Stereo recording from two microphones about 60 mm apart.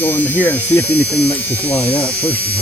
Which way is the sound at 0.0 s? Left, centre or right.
Left.